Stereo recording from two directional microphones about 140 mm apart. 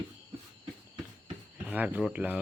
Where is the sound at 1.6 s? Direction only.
10° right (ahead or behind).